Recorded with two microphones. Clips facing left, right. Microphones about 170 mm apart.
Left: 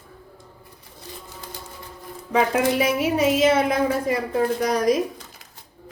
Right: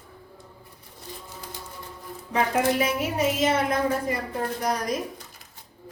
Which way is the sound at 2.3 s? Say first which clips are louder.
Left 3 dB; 90° left.